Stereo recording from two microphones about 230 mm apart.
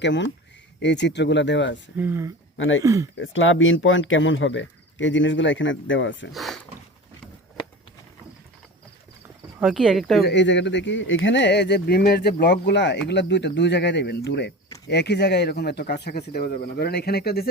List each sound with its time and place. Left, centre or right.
0.0 s speech: left
2.0 s speech: centre
2.6 s speech: left
2.8 s speech: centre
3.2 s speech: left
6.3 s a sound: centre
9.6 s speech: centre
10.2 s speech: left